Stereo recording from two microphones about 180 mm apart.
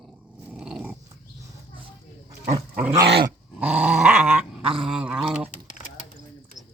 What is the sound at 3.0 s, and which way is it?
Dog, 65° right (ahead or behind).